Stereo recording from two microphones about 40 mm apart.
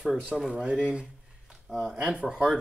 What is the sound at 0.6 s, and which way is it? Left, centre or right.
Speech, right.